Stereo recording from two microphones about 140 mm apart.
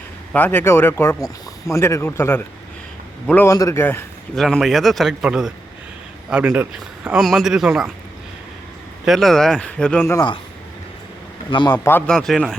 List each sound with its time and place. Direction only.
0.3 s speech: 15° left (ahead or behind)
4.4 s a man's voice: centre (ahead or behind)
9.0 s a man's voice: centre (ahead or behind)
11.5 s a man's voice: 30° left (ahead or behind)
11.8 s speech: 15° left (ahead or behind)
12.1 s a man's voice: centre (ahead or behind)